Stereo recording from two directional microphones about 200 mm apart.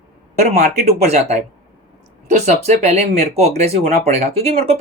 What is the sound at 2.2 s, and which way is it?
Speech, 35° right (ahead or behind).